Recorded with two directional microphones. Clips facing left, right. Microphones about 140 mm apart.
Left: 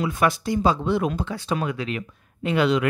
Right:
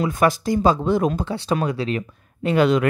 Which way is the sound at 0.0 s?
40° right (ahead or behind).